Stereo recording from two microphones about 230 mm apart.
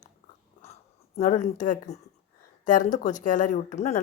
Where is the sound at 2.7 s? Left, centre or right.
Left.